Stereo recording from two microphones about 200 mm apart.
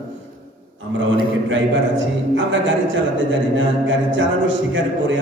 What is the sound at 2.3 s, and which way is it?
A man's voice, 65° right (ahead or behind).